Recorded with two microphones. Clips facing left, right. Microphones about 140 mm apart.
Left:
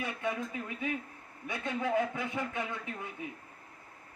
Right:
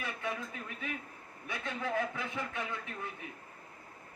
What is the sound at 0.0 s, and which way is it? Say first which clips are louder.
Speech: left 3 dB; 20° left (ahead or behind).